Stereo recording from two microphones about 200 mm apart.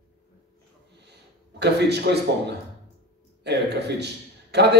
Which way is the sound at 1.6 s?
55° right (ahead or behind).